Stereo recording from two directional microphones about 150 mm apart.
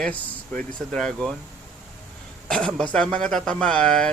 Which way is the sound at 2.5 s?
5° left (ahead or behind).